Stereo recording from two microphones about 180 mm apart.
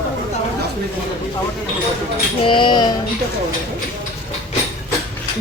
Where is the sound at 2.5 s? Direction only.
25° left (ahead or behind).